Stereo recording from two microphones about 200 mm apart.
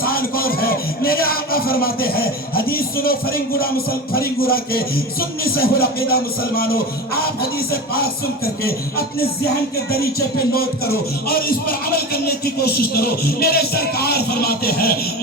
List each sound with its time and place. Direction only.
0.0 s speech: 50° left (ahead or behind)
7.7 s music: 50° left (ahead or behind)